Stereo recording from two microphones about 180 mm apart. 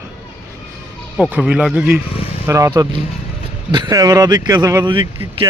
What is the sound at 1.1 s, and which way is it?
A man's voice, 5° right (ahead or behind).